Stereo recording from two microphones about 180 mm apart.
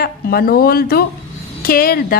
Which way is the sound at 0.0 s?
55° left (ahead or behind).